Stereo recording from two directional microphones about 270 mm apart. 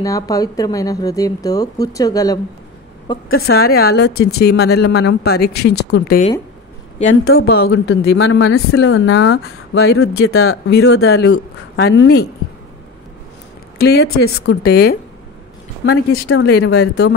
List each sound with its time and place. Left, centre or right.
0.0 s speech: centre
3.4 s speech: left
13.7 s speech: left
16.3 s speech: left